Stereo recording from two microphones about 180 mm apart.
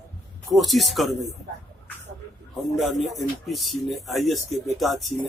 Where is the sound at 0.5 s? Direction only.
Centre (ahead or behind).